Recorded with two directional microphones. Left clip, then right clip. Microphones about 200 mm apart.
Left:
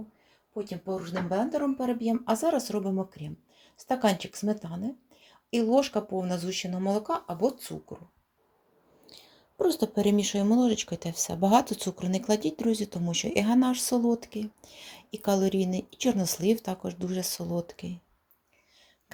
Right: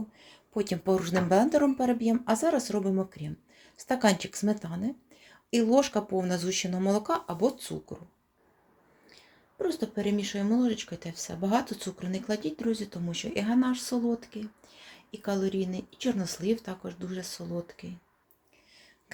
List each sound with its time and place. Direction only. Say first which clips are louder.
0.5 s speech: right 6 dB; 45° right (ahead or behind); by 1.7 s 25° right (ahead or behind)
1.8 s speech: right 2 dB; 10° right (ahead or behind)
9.6 s speech: left 5 dB; 25° left (ahead or behind)